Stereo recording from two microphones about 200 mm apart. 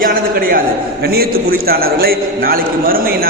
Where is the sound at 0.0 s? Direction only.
45° right (ahead or behind).